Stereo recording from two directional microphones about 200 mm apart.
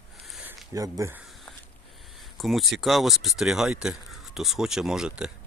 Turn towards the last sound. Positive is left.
turn(degrees=-5)  # may be behind; listen again after turning